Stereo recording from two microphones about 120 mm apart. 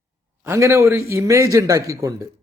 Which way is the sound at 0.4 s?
20° right (ahead or behind).